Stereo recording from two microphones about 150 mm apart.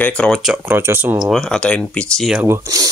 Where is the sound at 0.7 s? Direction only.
15° right (ahead or behind).